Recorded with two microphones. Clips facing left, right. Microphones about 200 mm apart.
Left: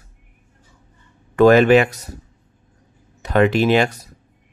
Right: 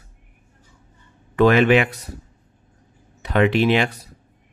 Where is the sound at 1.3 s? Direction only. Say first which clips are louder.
Left 4 dB; 40° left (ahead or behind).